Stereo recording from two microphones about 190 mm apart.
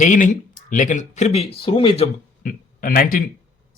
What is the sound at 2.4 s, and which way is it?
Speech, 50° left (ahead or behind).